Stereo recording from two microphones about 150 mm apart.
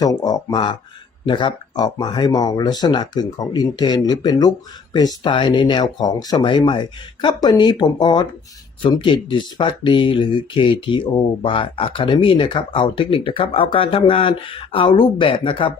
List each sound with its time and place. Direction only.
0.0 s speech: 25° left (ahead or behind)